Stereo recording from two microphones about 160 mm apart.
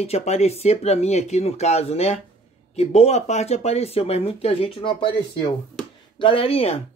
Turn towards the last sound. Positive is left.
turn(degrees=40)  # may be behind; listen again after turning